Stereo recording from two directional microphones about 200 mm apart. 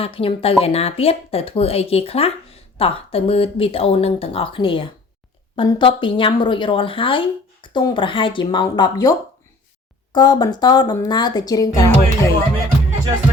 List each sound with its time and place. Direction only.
0.0 s speech: 25° left (ahead or behind)